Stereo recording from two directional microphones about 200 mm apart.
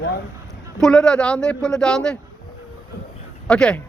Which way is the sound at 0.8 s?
5° left (ahead or behind).